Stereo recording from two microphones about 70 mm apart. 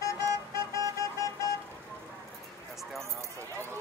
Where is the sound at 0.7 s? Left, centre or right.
Left.